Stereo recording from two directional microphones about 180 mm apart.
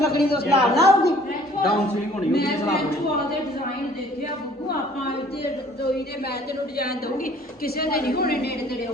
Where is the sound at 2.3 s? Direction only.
60° left (ahead or behind).